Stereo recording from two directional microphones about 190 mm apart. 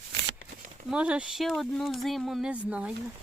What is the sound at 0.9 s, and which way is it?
Speech, 5° right (ahead or behind).